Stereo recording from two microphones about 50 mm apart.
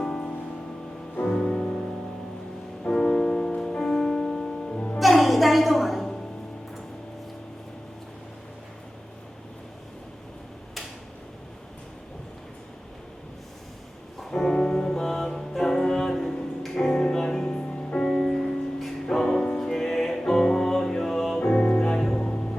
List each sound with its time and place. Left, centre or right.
0.0 s music: centre
2.9 s music: centre
4.9 s a sound: centre
14.2 s music: centre